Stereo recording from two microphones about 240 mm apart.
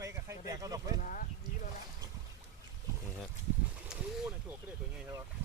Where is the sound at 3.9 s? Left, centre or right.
Centre.